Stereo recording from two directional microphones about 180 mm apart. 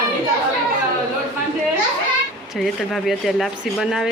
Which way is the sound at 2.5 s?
Centre (ahead or behind).